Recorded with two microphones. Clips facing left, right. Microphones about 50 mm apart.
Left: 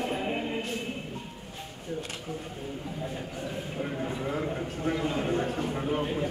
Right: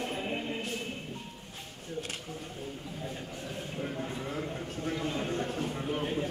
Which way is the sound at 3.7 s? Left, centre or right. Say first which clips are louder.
Left 3 dB; centre.